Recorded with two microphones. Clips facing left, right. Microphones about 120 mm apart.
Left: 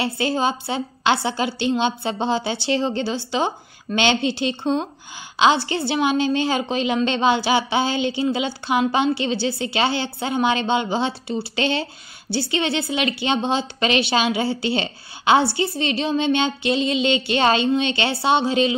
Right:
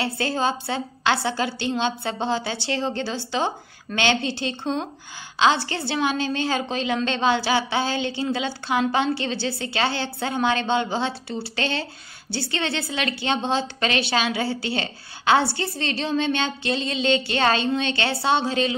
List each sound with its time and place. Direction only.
0.0 s a woman's voice: 20° left (ahead or behind)